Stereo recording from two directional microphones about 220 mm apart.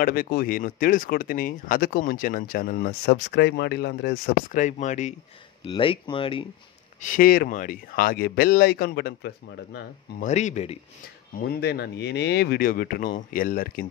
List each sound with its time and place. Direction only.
0.0 s speech: 40° left (ahead or behind)
5.7 s speech: 20° left (ahead or behind)
7.0 s speech: 40° left (ahead or behind)
10.2 s speech: 30° left (ahead or behind)
11.3 s speech: 45° left (ahead or behind)